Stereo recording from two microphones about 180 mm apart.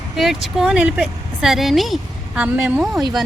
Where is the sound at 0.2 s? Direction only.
Centre (ahead or behind).